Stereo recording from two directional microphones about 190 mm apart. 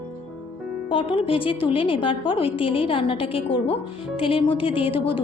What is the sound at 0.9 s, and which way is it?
A woman's voice, 30° left (ahead or behind).